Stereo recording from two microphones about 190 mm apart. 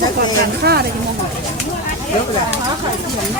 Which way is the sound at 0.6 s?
60° right (ahead or behind).